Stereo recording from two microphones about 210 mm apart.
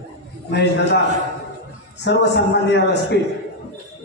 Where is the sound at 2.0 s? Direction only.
55° left (ahead or behind).